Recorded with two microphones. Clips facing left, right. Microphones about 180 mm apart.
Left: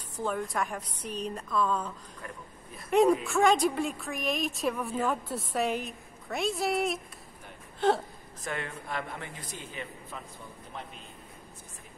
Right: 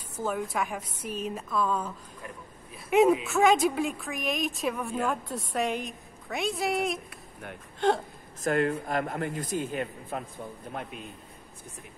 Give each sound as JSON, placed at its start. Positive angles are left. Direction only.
{"t": 0.2, "sound": "a woman's voice", "side_deg": -5}
{"t": 2.9, "sound": "a woman's voice", "side_deg": -5}
{"t": 8.5, "sound": "a man's voice", "side_deg": -45}